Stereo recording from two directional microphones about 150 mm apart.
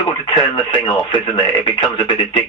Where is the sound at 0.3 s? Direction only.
30° left (ahead or behind).